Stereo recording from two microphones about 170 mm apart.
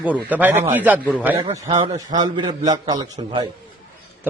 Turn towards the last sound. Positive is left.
turn(degrees=-25)  # may be behind; listen again after turning